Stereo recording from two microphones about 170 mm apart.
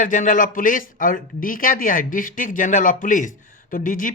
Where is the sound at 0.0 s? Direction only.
50° left (ahead or behind).